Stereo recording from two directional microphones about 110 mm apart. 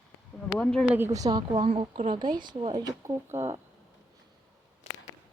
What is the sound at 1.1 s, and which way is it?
Speech, 35° right (ahead or behind).